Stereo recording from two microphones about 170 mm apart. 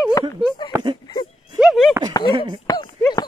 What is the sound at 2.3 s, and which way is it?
Speech, 25° right (ahead or behind).